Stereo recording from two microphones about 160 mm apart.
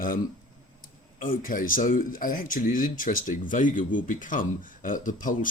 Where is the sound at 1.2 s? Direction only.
60° left (ahead or behind).